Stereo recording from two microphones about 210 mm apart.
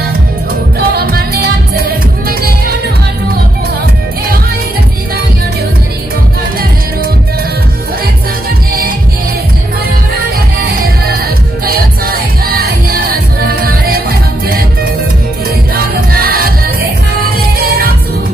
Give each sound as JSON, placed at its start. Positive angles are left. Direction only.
{"t": 0.7, "sound": "music", "side_deg": -50}
{"t": 11.6, "sound": "music", "side_deg": -45}
{"t": 15.7, "sound": "music", "side_deg": -45}